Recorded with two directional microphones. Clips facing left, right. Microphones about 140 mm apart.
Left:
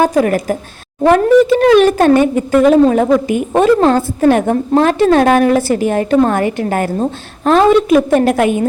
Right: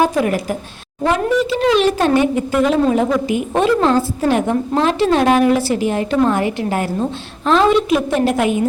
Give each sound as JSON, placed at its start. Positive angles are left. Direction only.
{"t": 0.0, "sound": "speech", "side_deg": 45}